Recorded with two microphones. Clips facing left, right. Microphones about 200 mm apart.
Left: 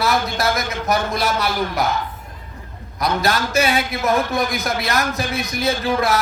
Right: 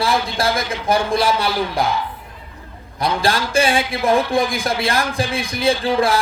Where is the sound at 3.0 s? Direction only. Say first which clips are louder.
Right 1 dB; 30° right (ahead or behind).